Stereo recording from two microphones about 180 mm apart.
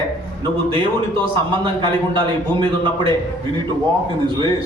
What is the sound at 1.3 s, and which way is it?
Speech, 25° right (ahead or behind).